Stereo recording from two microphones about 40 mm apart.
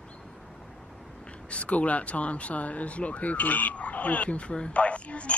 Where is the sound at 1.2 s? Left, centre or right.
Left.